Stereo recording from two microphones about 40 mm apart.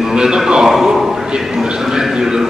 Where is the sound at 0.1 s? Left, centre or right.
Centre.